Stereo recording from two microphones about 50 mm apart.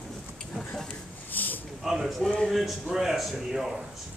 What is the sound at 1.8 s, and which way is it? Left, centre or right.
Speech, centre.